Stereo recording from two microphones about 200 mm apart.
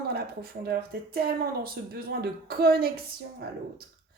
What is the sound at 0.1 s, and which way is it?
A woman's voice, 50° right (ahead or behind).